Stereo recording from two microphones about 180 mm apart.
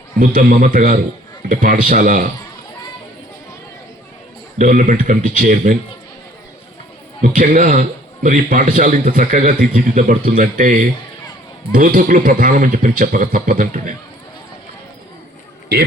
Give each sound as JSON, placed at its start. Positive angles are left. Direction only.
{"t": 0.2, "sound": "a man's voice", "side_deg": -50}
{"t": 4.5, "sound": "a man's voice", "side_deg": -45}
{"t": 7.2, "sound": "a man's voice", "side_deg": -50}